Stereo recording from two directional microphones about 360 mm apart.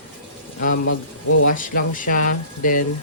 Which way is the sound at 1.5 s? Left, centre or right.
Left.